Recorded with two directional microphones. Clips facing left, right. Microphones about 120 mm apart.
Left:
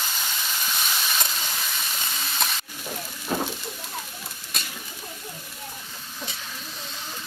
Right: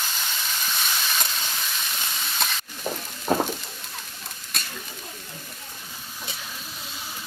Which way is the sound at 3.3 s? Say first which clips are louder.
Right 5 dB; 45° right (ahead or behind).